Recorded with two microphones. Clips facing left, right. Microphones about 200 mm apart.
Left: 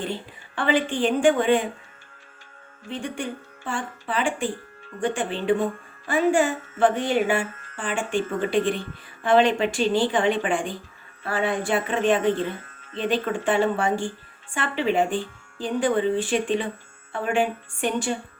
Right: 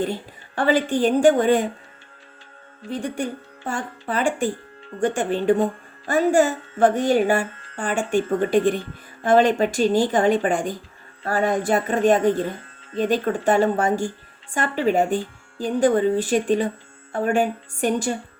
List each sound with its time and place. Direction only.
0.0 s speech: 40° right (ahead or behind)
2.9 s speech: 40° right (ahead or behind)